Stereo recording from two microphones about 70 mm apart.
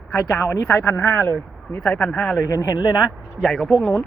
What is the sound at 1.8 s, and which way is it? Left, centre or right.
Speech, centre.